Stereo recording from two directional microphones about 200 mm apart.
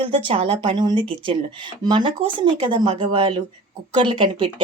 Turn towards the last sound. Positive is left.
turn(degrees=-25)  # may be behind; listen again after turning